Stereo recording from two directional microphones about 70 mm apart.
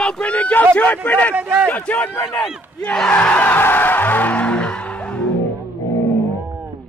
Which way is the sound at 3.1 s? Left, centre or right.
Left.